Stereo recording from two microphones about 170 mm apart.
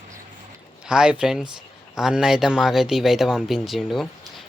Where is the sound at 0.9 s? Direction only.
5° right (ahead or behind).